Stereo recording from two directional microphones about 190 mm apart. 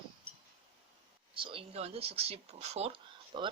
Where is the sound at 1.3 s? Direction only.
25° right (ahead or behind).